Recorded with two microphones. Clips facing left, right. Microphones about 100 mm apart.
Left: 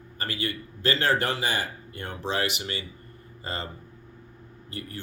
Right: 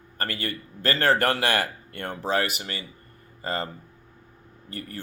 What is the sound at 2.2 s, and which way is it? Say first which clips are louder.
Speech: right 2 dB; 45° right (ahead or behind).